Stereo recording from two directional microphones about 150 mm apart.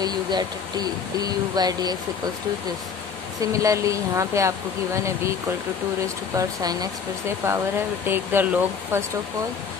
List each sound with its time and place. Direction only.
0.0 s speech: 25° right (ahead or behind)
3.3 s speech: 20° right (ahead or behind)
6.3 s speech: 25° right (ahead or behind)